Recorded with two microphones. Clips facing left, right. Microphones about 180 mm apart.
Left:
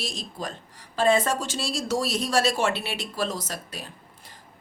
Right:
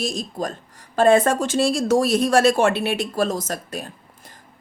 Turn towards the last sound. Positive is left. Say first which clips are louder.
# right 7 dB
turn(degrees=-50)  # may be behind; listen again after turning